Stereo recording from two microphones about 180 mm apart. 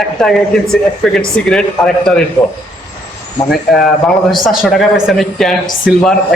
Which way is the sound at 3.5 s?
Centre (ahead or behind).